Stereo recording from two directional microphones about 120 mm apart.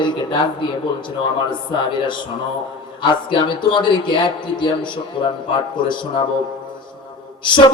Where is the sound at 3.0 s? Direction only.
40° left (ahead or behind).